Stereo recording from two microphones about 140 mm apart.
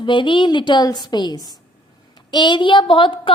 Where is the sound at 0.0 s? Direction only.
35° left (ahead or behind).